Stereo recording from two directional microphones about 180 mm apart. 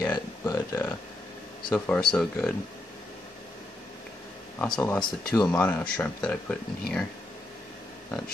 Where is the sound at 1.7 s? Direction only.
5° left (ahead or behind).